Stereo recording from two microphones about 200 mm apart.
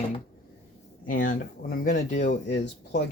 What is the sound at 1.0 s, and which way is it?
Speech, 40° left (ahead or behind).